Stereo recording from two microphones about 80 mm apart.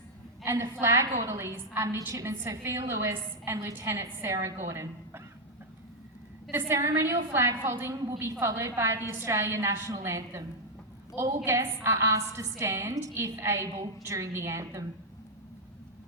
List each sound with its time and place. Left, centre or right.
0.4 s a woman's voice: right
6.7 s a woman's voice: right